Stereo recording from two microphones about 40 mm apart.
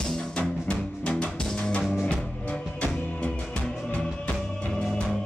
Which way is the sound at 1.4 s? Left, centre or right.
Centre.